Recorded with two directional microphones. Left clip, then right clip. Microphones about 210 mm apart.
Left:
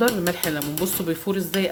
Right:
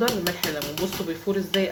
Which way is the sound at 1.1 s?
50° left (ahead or behind).